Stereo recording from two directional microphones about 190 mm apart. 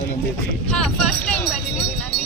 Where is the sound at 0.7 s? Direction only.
5° left (ahead or behind).